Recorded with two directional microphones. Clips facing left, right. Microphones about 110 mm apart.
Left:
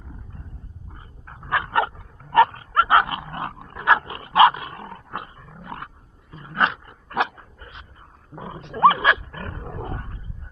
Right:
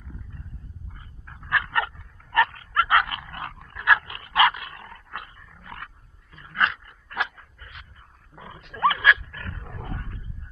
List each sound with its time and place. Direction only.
0.9 s dog: 30° left (ahead or behind)